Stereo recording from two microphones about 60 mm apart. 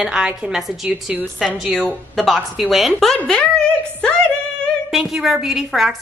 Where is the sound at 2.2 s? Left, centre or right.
Centre.